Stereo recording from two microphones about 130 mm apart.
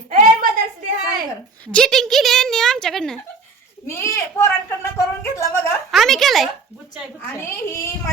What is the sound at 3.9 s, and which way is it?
Speech, 20° left (ahead or behind).